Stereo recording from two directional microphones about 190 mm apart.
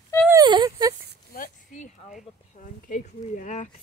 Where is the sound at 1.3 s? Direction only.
45° left (ahead or behind).